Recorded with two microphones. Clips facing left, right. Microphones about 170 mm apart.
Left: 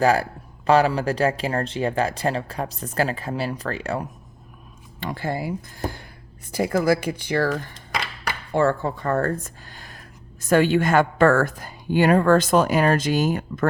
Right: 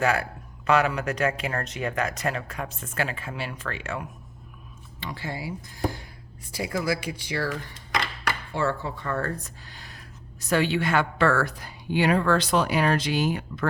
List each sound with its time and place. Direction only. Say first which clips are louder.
0.0 s speech: left 6 dB; 35° left (ahead or behind)
4.9 s a woman's voice: left 7 dB; 50° left (ahead or behind)